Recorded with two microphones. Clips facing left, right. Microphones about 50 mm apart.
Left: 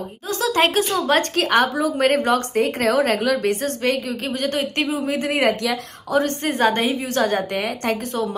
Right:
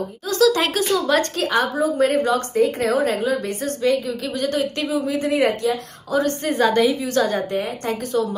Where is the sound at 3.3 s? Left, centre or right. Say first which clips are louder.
Left 3 dB; left.